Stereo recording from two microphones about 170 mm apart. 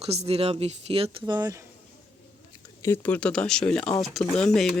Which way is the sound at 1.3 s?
25° right (ahead or behind).